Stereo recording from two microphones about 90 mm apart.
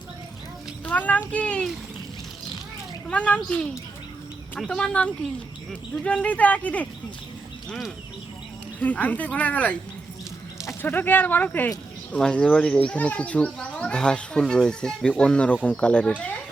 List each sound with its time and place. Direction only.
0.9 s speech: 15° left (ahead or behind)
3.1 s speech: 15° left (ahead or behind)
8.8 s speech: 15° left (ahead or behind)
10.8 s speech: 20° left (ahead or behind)